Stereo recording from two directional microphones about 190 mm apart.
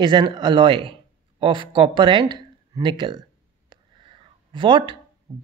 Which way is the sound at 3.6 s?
25° right (ahead or behind).